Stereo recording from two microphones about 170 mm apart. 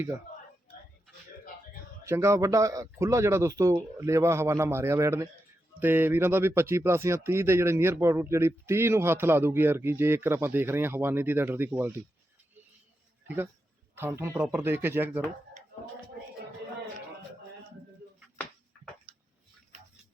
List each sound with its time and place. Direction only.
2.0 s speech: 15° right (ahead or behind)
13.2 s a man's voice: 10° right (ahead or behind)
19.1 s a sound: 35° right (ahead or behind)